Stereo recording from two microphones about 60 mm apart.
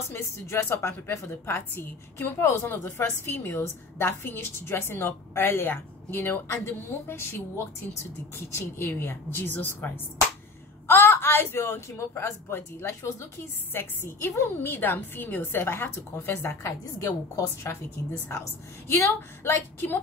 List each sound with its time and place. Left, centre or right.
0.1 s a woman's voice: left
10.9 s a woman's voice: left
17.0 s a woman's voice: left
18.9 s a woman's voice: left